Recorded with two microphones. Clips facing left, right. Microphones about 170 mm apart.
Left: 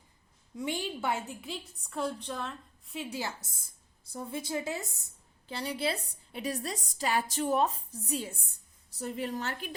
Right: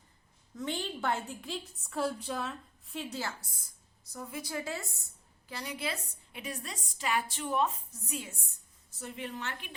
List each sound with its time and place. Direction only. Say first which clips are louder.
0.5 s a woman's voice: left 2 dB; 10° left (ahead or behind)
3.2 s a woman's voice: left 1 dB; 20° left (ahead or behind)
5.5 s a woman's voice: left 5 dB; 30° left (ahead or behind)